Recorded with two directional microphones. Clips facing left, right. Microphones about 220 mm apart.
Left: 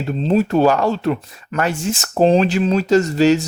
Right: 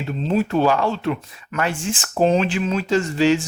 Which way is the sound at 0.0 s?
35° left (ahead or behind).